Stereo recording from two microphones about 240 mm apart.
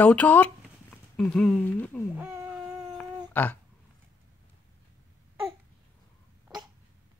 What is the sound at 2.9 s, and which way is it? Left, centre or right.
Cat, centre.